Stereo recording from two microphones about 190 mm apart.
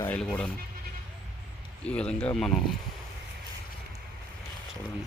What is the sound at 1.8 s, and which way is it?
Speech, 5° left (ahead or behind).